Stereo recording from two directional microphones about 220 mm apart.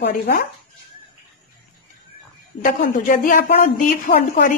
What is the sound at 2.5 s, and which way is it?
Speech, 40° left (ahead or behind).